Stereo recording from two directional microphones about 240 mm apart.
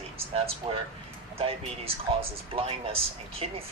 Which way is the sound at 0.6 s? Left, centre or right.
Right.